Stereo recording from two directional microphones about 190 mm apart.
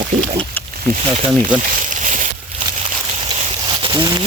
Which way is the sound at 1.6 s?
40° right (ahead or behind).